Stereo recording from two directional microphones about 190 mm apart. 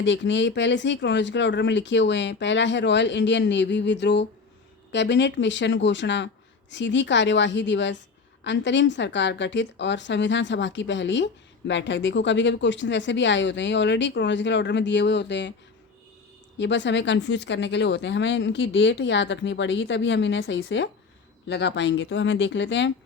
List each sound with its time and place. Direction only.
0.0 s speech: 75° left (ahead or behind)
16.6 s speech: 70° left (ahead or behind)